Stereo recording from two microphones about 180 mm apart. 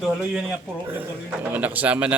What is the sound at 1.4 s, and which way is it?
Speech, 10° right (ahead or behind).